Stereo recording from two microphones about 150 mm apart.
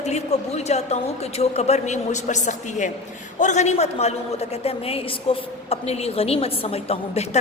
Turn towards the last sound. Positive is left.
turn(degrees=45)  # may be behind; listen again after turning